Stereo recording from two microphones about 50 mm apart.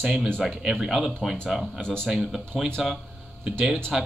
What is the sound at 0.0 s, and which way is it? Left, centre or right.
Speech, centre.